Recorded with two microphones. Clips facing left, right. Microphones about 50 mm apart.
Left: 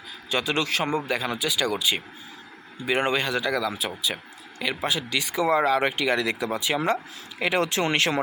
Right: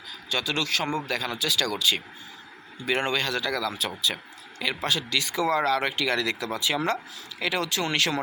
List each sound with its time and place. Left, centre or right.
0.3 s speech: left